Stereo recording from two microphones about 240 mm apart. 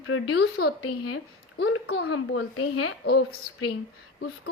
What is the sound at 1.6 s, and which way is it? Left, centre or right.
A woman's voice, left.